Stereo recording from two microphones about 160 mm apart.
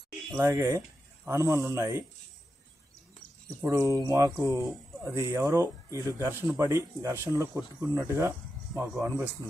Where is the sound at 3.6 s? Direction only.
20° right (ahead or behind).